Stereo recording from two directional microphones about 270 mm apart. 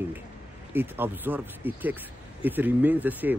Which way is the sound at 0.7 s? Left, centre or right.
Centre.